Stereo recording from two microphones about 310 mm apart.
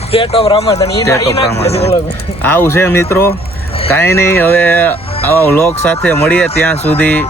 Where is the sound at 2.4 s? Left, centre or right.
Centre.